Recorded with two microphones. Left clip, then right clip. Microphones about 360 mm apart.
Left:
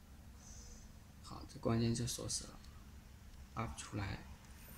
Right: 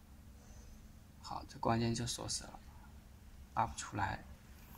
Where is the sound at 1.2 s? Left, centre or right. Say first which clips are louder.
Right 4 dB; right.